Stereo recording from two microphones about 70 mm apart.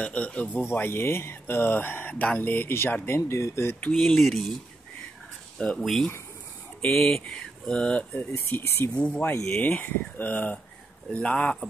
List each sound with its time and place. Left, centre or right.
0.0 s speech: centre
0.7 s speech: left
4.2 s speech: centre
5.6 s speech: centre
8.3 s speech: left
8.9 s speech: centre